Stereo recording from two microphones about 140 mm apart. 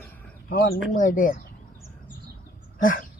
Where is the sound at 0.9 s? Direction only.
75° left (ahead or behind).